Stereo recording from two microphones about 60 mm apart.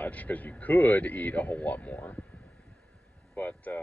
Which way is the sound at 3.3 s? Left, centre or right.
Left.